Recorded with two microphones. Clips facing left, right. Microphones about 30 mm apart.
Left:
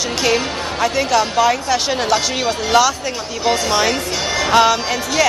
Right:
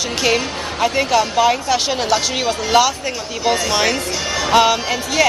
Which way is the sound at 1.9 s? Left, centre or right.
Centre.